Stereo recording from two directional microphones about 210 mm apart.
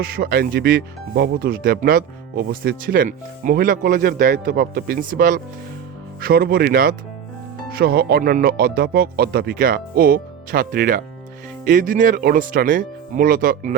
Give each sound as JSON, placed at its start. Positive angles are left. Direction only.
{"t": 0.0, "sound": "speech", "side_deg": -45}